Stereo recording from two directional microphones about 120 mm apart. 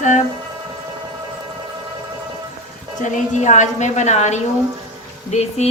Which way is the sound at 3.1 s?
85° left.